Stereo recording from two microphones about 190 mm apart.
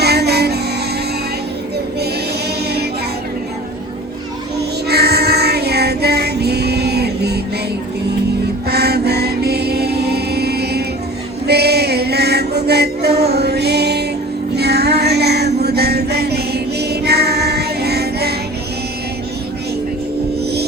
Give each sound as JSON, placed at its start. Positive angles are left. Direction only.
{"t": 0.0, "sound": "music", "side_deg": -60}
{"t": 4.9, "sound": "child singing", "side_deg": -60}
{"t": 8.6, "sound": "music", "side_deg": -55}